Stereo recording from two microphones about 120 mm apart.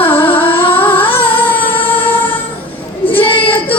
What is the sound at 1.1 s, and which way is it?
Music, 50° left (ahead or behind).